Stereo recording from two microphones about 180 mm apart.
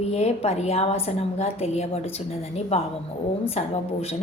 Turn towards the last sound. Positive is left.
turn(degrees=35)  # may be behind; listen again after turning